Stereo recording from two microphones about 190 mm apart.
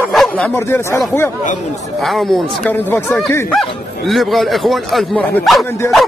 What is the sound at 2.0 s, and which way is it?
A man's voice, centre (ahead or behind).